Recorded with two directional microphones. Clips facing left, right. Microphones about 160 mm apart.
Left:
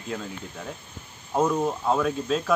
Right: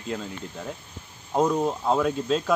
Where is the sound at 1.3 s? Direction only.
15° right (ahead or behind).